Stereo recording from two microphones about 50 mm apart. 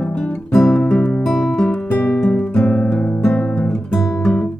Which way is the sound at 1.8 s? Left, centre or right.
Left.